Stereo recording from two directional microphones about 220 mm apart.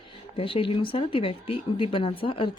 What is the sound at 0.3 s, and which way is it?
Speech, 25° left (ahead or behind).